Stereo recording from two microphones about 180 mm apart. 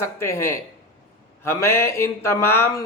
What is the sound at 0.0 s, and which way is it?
Speech, 15° left (ahead or behind).